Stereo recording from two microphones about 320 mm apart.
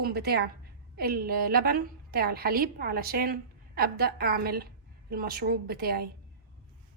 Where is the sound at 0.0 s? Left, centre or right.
Right.